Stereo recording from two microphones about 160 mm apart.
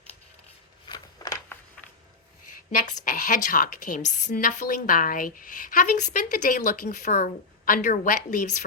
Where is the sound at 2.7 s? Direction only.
55° left (ahead or behind).